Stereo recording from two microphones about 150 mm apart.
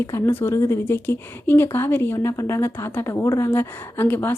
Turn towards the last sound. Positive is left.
turn(degrees=15)  # may be behind; listen again after turning